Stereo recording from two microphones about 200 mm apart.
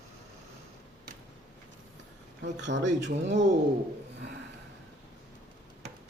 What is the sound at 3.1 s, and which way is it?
Speech, 40° right (ahead or behind).